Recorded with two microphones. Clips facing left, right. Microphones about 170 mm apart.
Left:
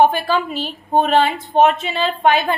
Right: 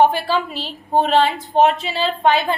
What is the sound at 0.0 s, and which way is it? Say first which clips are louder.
Speech: left 1 dB; 20° left (ahead or behind).